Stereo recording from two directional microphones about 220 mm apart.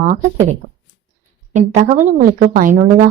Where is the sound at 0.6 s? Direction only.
20° right (ahead or behind).